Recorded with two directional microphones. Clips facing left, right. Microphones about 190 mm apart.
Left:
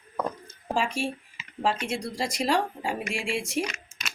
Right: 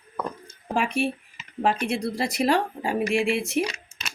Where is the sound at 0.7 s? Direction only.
60° right (ahead or behind).